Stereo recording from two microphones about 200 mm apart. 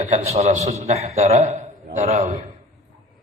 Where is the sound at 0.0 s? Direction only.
35° right (ahead or behind).